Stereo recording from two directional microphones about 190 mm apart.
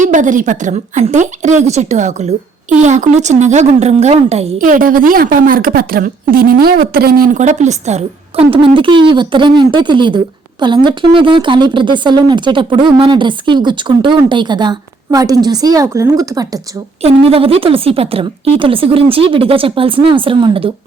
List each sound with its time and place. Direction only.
0.0 s a woman's voice: 40° right (ahead or behind)
4.5 s a woman's voice: 45° right (ahead or behind); by 16.6 s 20° right (ahead or behind)
17.0 s speech: 30° right (ahead or behind)